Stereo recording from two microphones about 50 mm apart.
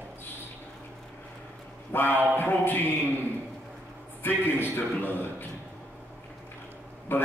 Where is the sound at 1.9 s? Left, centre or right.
Left.